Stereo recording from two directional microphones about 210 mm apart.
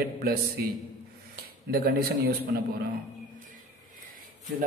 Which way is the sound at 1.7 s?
45° right (ahead or behind).